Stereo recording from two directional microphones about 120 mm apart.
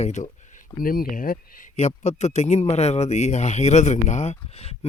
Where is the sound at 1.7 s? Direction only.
70° left (ahead or behind).